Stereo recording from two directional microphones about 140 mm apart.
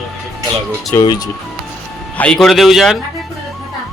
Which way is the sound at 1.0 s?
30° left (ahead or behind).